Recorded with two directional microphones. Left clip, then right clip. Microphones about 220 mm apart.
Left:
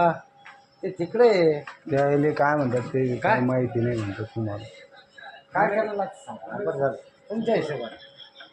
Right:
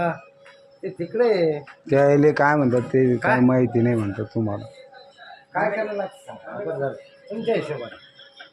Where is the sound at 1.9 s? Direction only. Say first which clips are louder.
Right 6 dB; 55° right (ahead or behind).